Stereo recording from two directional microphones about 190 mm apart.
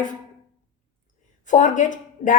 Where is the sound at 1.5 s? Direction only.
40° left (ahead or behind).